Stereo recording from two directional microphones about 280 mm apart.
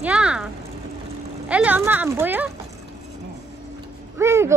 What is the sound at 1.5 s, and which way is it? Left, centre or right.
A child's voice, centre.